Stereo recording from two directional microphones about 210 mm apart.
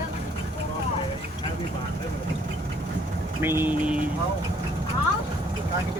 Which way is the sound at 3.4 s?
10° right (ahead or behind).